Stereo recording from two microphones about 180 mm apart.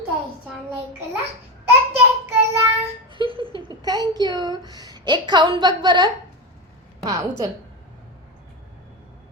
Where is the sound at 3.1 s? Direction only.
30° right (ahead or behind).